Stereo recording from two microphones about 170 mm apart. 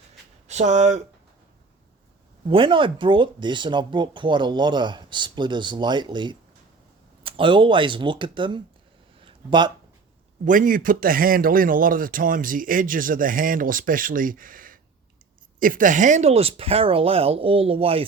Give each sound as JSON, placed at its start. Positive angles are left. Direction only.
{"t": 0.4, "sound": "speech", "side_deg": -45}
{"t": 2.5, "sound": "speech", "side_deg": -30}
{"t": 9.2, "sound": "a sound", "side_deg": -25}
{"t": 10.4, "sound": "a man's voice", "side_deg": -50}